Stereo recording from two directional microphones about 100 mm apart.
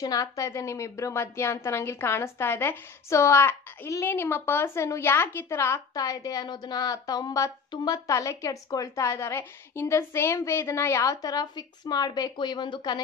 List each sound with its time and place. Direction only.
0.0 s a woman's voice: 35° left (ahead or behind)
8.1 s a woman's voice: 30° left (ahead or behind); by 13.0 s 45° left (ahead or behind)